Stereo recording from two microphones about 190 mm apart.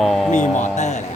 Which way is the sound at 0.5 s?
40° left (ahead or behind).